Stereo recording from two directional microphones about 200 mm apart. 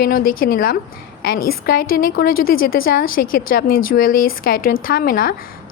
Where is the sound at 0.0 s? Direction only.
45° left (ahead or behind).